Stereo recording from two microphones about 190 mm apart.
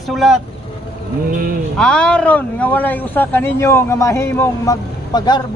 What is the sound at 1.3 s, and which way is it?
Speech, 50° right (ahead or behind).